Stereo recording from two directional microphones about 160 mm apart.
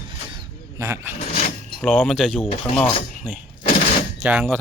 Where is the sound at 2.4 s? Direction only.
35° left (ahead or behind).